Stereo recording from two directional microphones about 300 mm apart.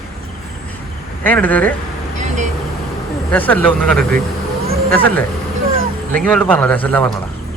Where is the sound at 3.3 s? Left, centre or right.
Centre.